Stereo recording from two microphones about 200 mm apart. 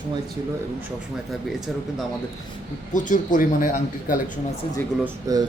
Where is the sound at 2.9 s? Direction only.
40° left (ahead or behind).